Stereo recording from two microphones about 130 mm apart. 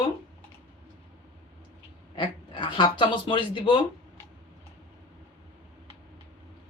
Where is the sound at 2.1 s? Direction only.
40° left (ahead or behind).